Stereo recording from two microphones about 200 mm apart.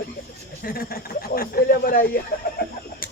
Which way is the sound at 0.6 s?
45° left (ahead or behind).